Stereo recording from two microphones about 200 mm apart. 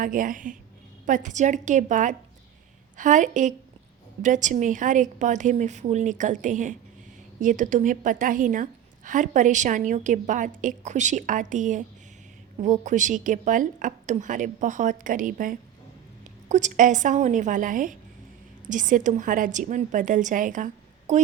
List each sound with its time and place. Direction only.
0.0 s a woman's voice: 40° right (ahead or behind)